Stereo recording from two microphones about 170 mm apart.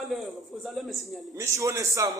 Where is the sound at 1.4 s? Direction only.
20° right (ahead or behind).